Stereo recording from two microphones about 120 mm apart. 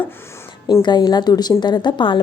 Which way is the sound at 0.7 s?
35° left (ahead or behind).